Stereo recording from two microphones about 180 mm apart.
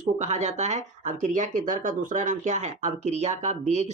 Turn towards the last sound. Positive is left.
turn(degrees=-40)  # may be behind; listen again after turning